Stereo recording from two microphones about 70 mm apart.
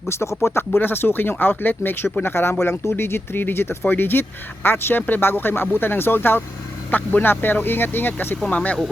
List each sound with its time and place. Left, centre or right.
0.1 s speech: left
8.4 s speech: centre